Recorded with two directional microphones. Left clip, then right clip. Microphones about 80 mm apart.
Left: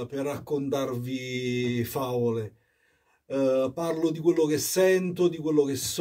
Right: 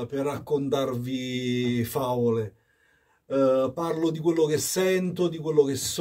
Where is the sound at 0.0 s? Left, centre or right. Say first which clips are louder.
Right 2 dB; right.